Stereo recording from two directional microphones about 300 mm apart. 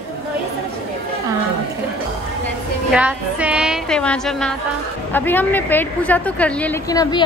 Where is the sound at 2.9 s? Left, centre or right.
Centre.